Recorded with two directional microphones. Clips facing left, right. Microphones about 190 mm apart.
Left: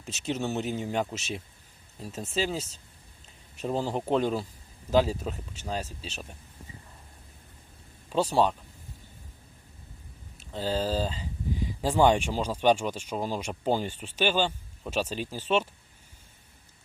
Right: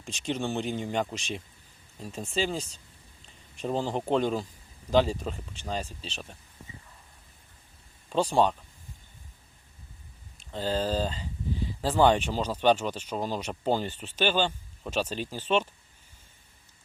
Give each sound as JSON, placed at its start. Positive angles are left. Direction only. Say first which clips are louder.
{"t": 0.0, "sound": "speech", "louder": "even", "side_deg": 5}
{"t": 8.1, "sound": "speech", "louder": "even", "side_deg": 5}
{"t": 10.5, "sound": "speech", "louder": "even", "side_deg": 10}